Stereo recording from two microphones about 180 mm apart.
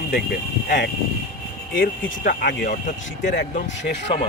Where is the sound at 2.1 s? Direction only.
50° left (ahead or behind).